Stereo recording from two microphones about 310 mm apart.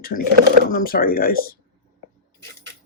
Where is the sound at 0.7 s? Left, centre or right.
Left.